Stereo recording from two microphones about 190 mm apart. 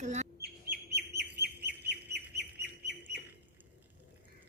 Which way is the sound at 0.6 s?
55° right (ahead or behind).